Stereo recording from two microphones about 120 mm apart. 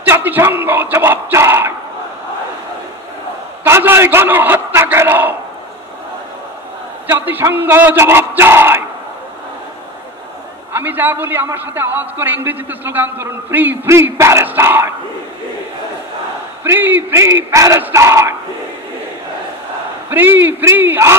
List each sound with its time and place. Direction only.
0.0 s a sound: 15° right (ahead or behind)
3.6 s a man's voice: 20° right (ahead or behind)
7.1 s a man's voice: 15° right (ahead or behind)
10.7 s a man's voice: 15° right (ahead or behind)
16.6 s a man's voice: 20° right (ahead or behind)
20.1 s a man's voice: 15° right (ahead or behind)